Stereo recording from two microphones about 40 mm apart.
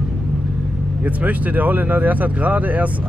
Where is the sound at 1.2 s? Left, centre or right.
Right.